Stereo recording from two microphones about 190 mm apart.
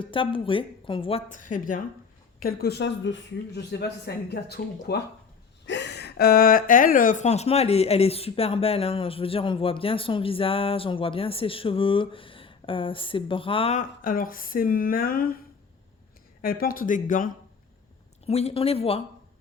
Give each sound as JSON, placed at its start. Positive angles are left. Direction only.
{"t": 0.0, "sound": "speech", "side_deg": 25}
{"t": 1.3, "sound": "a woman's voice", "side_deg": 45}
{"t": 14.0, "sound": "speech", "side_deg": 45}
{"t": 16.4, "sound": "speech", "side_deg": 50}
{"t": 18.3, "sound": "speech", "side_deg": 35}